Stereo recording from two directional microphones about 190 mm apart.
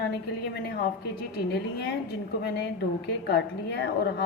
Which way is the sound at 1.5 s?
60° left (ahead or behind).